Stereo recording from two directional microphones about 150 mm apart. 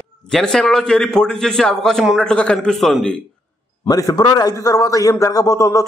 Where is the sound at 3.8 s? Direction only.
25° left (ahead or behind).